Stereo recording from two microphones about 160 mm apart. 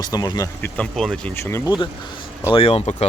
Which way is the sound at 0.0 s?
25° left (ahead or behind).